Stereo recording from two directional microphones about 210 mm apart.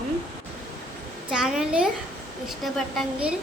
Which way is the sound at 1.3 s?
Centre (ahead or behind).